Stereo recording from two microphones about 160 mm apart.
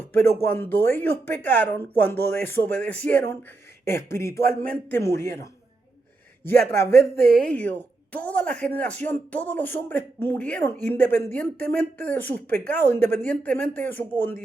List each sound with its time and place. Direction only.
0.4 s speech: 15° left (ahead or behind)
6.4 s speech: 15° left (ahead or behind)
7.2 s speech: 70° right (ahead or behind)
7.4 s speech: 10° left (ahead or behind)